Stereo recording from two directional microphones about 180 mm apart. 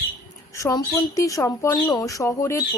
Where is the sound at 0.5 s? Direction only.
15° left (ahead or behind).